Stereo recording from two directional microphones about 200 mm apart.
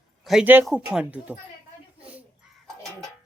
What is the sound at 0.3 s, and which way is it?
Speech, 5° right (ahead or behind).